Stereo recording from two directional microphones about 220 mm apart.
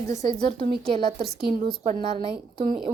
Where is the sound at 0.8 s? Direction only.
25° right (ahead or behind).